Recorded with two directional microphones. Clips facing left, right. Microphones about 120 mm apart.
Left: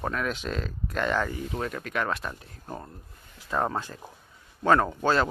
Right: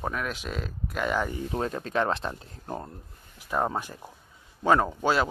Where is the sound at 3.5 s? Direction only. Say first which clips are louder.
Even; 15° right (ahead or behind).